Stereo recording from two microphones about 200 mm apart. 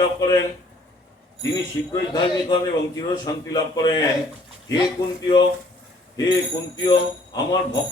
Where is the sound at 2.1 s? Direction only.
20° left (ahead or behind).